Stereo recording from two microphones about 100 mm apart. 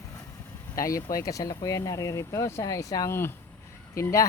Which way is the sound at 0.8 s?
35° left (ahead or behind).